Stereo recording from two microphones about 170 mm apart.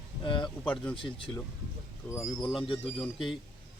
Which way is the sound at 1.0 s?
30° left (ahead or behind).